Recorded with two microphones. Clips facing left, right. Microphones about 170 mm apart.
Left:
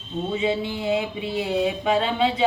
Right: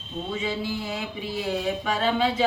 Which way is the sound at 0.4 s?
25° left (ahead or behind).